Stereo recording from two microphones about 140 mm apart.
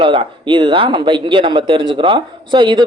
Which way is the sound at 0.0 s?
35° right (ahead or behind).